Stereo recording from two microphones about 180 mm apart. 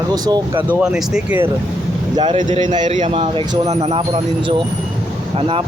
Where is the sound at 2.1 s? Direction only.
25° right (ahead or behind).